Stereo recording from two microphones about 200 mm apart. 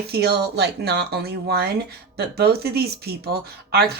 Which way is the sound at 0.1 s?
55° right (ahead or behind).